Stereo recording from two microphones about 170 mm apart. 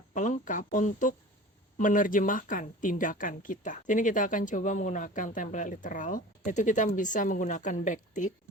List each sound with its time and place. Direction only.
0.1 s speech: 50° left (ahead or behind)